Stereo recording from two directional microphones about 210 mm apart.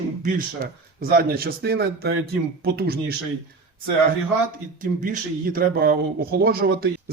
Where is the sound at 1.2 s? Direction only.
45° right (ahead or behind).